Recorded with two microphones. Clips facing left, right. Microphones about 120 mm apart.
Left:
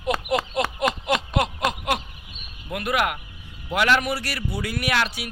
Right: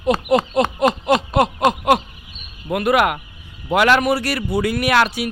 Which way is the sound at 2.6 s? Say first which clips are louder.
Right 8 dB; 55° right (ahead or behind).